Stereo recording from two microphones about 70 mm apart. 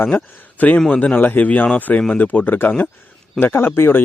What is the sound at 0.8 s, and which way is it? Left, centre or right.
A man's voice, centre.